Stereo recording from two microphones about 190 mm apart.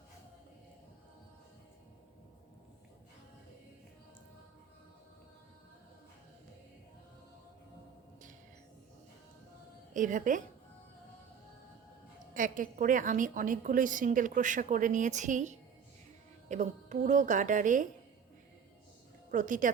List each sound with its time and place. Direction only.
9.9 s a woman's voice: 45° right (ahead or behind)
12.3 s a woman's voice: 45° right (ahead or behind)
19.3 s a woman's voice: 40° right (ahead or behind)